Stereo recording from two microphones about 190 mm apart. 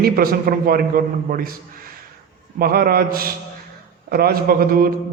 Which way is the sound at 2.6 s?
50° right (ahead or behind).